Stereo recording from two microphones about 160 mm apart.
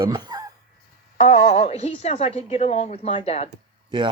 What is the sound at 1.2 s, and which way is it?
Speech, 45° left (ahead or behind).